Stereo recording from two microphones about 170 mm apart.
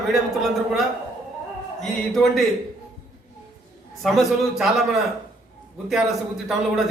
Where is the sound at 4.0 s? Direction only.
Centre (ahead or behind).